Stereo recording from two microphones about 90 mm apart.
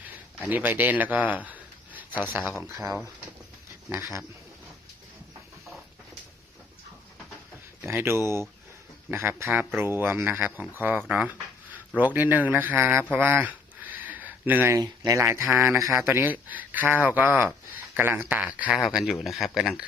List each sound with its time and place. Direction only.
0.3 s speech: 20° right (ahead or behind)
2.6 s speech: 30° right (ahead or behind)
7.8 s speech: 25° right (ahead or behind)
11.1 s a sound: 15° right (ahead or behind)
11.9 s speech: 20° right (ahead or behind)
14.8 s speech: 35° right (ahead or behind); by 18.8 s 15° right (ahead or behind)
18.9 s speech: 5° right (ahead or behind)